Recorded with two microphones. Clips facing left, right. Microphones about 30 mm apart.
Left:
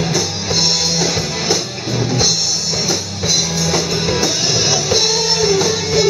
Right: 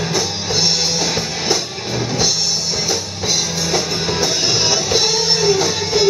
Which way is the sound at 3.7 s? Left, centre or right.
Centre.